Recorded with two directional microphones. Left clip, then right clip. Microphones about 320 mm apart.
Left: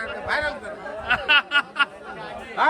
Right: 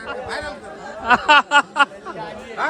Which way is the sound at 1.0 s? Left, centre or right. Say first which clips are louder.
Right 6 dB; centre.